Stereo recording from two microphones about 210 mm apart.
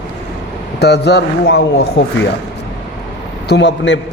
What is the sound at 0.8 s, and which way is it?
Speech, 50° left (ahead or behind).